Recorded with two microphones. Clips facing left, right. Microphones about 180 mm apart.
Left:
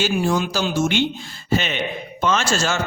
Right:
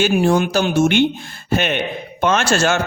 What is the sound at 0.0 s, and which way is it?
A man's voice, 60° right (ahead or behind).